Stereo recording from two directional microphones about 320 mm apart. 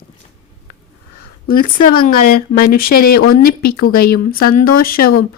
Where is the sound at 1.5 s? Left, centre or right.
Left.